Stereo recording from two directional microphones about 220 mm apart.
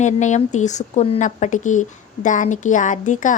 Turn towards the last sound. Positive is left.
turn(degrees=35)  # may be behind; listen again after turning